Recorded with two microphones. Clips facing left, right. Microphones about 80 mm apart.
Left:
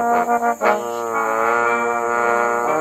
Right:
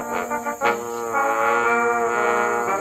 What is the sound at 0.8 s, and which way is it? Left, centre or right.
Brass instrument, left.